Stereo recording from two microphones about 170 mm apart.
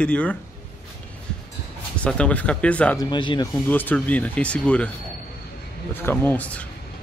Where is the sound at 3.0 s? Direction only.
25° left (ahead or behind).